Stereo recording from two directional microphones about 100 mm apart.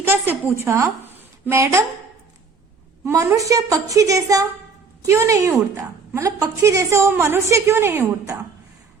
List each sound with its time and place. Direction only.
0.4 s a woman's voice: 25° right (ahead or behind)
3.0 s a woman's voice: 30° right (ahead or behind)